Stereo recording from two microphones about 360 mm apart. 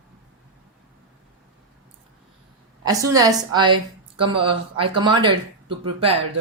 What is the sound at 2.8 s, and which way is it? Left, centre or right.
Speech, centre.